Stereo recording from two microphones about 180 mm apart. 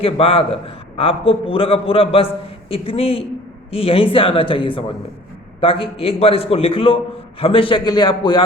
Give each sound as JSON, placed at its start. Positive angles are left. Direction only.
{"t": 0.0, "sound": "a man's voice", "side_deg": 30}